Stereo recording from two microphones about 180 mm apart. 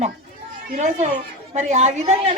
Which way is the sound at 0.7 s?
40° right (ahead or behind).